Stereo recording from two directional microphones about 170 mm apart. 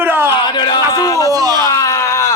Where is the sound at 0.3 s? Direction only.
25° left (ahead or behind).